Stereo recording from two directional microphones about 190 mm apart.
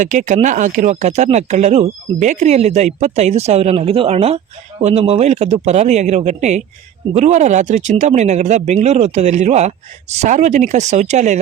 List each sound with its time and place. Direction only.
0.0 s speech: 40° right (ahead or behind)